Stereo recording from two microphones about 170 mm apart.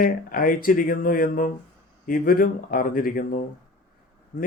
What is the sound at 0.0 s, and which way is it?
Speech, 55° left (ahead or behind).